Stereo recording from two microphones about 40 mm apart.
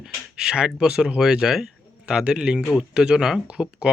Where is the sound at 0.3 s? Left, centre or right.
Centre.